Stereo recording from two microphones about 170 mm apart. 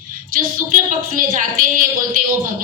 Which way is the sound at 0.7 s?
55° right (ahead or behind).